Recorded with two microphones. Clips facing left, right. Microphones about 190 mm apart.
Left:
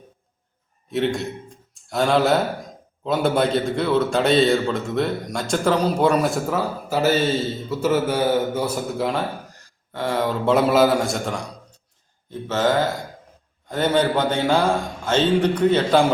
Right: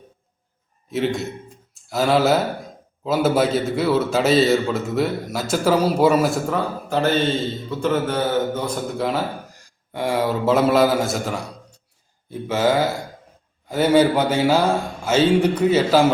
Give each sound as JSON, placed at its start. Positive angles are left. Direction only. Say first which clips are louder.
{"t": 0.9, "sound": "a man's voice", "louder": "even", "side_deg": 0}
{"t": 9.9, "sound": "a man's voice", "louder": "right 2 dB", "side_deg": -10}